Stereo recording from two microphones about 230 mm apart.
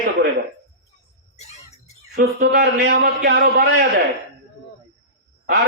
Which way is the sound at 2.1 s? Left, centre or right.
Right.